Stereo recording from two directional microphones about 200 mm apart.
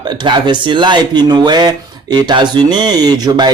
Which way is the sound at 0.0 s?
20° right (ahead or behind).